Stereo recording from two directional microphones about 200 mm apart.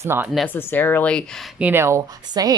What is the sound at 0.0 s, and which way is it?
Speech, 10° right (ahead or behind).